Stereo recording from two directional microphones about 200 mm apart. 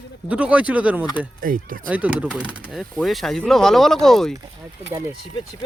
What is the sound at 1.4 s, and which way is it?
Speech, 45° right (ahead or behind).